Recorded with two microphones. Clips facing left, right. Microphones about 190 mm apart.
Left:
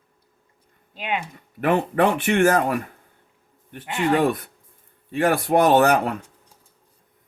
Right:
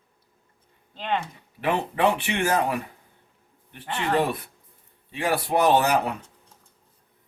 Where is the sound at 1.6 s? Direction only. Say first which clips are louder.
Left 4 dB; 50° left (ahead or behind).